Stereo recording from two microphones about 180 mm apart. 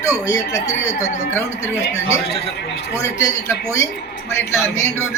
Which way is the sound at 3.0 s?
15° left (ahead or behind).